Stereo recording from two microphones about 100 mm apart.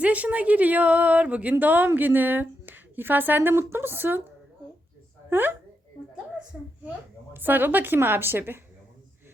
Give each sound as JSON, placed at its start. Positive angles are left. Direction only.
{"t": 0.0, "sound": "speech", "side_deg": -15}
{"t": 5.3, "sound": "a woman's voice", "side_deg": -20}